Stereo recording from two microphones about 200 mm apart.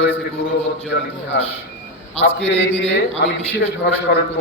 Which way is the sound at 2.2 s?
65° left (ahead or behind).